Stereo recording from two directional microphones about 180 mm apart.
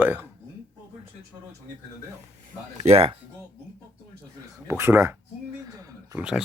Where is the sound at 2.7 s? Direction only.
35° right (ahead or behind).